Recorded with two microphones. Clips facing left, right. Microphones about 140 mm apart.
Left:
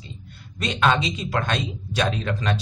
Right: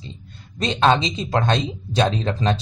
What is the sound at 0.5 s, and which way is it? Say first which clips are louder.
A man's voice: right 4 dB; 30° right (ahead or behind).